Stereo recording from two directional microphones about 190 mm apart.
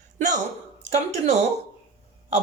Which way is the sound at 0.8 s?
35° right (ahead or behind).